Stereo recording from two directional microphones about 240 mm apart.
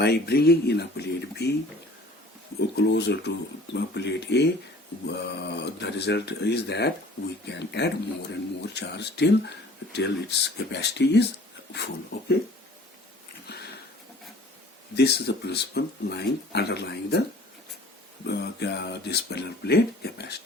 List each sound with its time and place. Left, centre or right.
0.0 s speech: left
2.6 s speech: left
13.5 s a sound: left
14.9 s speech: left
18.3 s speech: left